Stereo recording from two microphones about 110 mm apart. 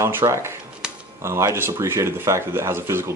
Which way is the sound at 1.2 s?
25° right (ahead or behind).